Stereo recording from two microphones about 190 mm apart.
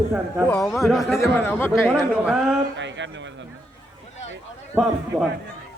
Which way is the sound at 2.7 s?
70° right (ahead or behind).